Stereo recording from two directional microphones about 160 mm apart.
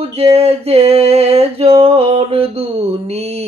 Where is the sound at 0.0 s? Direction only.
40° right (ahead or behind).